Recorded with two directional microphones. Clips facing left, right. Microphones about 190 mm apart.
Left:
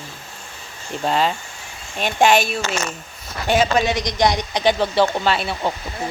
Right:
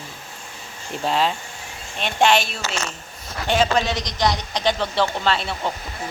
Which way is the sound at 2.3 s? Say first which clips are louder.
Left 3 dB; 45° left (ahead or behind).